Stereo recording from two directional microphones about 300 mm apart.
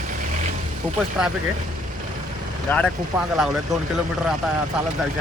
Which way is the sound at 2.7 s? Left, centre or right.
Centre.